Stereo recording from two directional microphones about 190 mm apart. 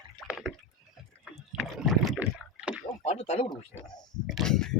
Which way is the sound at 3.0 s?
35° left (ahead or behind).